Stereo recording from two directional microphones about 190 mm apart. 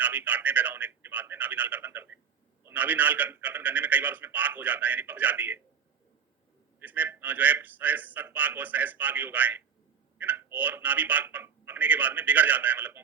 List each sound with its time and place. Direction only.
0.0 s a man's voice: 10° right (ahead or behind)
6.7 s a man's voice: 10° right (ahead or behind)